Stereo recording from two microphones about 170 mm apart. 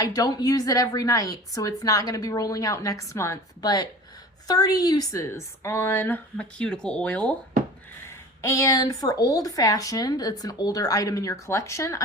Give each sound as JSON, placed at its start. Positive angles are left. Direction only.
{"t": 0.0, "sound": "a woman's voice", "side_deg": 20}
{"t": 8.4, "sound": "a woman's voice", "side_deg": 20}